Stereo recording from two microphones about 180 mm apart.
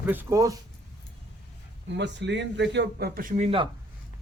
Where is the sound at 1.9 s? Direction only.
80° right; by 3.7 s 35° right (ahead or behind).